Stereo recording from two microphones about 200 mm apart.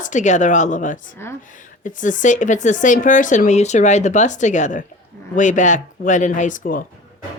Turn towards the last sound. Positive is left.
turn(degrees=45)  # may be behind; listen again after turning